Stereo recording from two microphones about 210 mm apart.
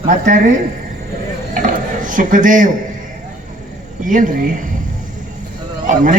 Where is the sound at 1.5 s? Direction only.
40° right (ahead or behind).